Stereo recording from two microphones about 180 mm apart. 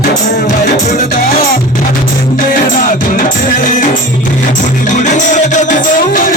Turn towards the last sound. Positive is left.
turn(degrees=50)  # may be behind; listen again after turning